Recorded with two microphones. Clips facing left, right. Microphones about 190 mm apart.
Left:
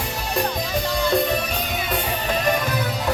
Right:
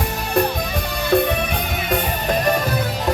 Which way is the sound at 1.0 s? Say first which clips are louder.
Right 5 dB; 60° right (ahead or behind).